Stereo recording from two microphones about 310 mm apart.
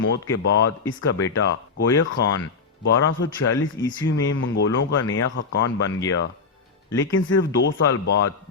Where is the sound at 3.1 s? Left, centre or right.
Left.